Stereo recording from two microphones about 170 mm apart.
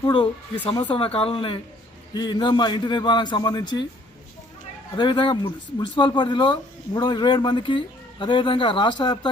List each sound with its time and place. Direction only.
0.0 s speech: 30° left (ahead or behind)
4.9 s speech: 30° left (ahead or behind)